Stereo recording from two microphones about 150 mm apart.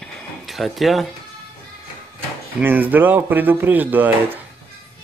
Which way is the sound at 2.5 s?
10° right (ahead or behind).